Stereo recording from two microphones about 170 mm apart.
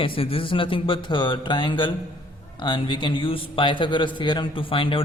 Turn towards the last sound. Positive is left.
turn(degrees=30)  # may be behind; listen again after turning